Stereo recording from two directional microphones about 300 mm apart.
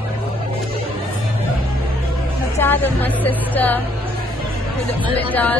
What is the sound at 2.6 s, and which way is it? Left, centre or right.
Speech, centre.